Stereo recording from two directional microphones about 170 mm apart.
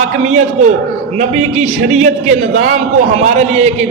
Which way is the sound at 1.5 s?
40° right (ahead or behind).